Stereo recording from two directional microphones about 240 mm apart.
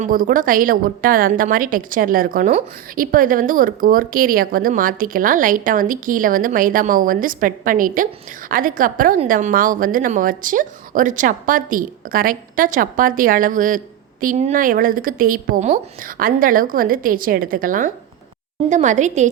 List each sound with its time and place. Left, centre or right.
0.0 s a woman's voice: right